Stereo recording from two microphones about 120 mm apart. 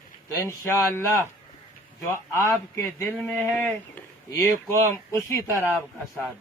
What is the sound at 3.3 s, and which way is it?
Speech, 15° left (ahead or behind).